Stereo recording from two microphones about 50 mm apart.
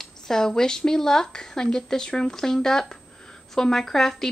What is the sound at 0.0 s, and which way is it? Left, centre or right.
A woman's voice, centre.